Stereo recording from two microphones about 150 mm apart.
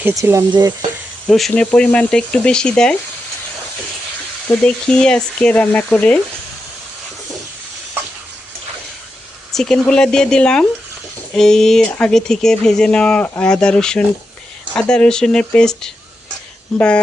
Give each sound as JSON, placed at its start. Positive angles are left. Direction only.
{"t": 0.0, "sound": "speech", "side_deg": -20}
{"t": 1.3, "sound": "speech", "side_deg": 0}
{"t": 4.4, "sound": "speech", "side_deg": 5}
{"t": 9.5, "sound": "speech", "side_deg": 5}